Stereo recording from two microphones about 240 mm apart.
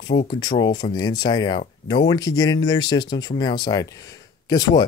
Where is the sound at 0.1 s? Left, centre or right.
Left.